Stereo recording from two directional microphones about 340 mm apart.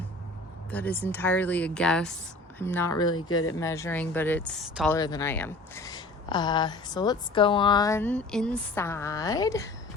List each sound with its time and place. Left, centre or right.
0.7 s speech: centre
3.2 s speech: left
3.6 s speech: centre
4.9 s speech: centre